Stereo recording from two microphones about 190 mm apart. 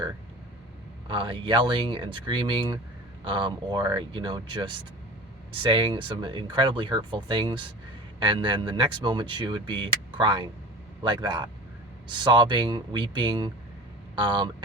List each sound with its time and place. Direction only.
1.0 s speech: 25° right (ahead or behind)